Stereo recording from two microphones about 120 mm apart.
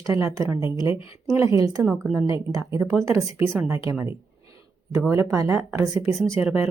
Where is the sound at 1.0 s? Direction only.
50° left (ahead or behind).